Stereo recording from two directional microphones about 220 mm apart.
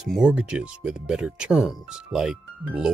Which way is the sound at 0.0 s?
5° right (ahead or behind).